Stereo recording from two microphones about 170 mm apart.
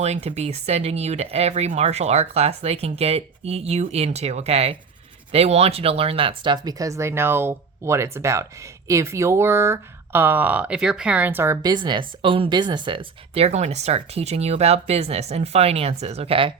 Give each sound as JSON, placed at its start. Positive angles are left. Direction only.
{"t": 0.0, "sound": "speech", "side_deg": -40}